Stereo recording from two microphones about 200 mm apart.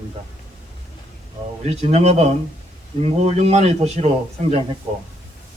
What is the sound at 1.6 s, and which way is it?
A man's voice, 30° right (ahead or behind).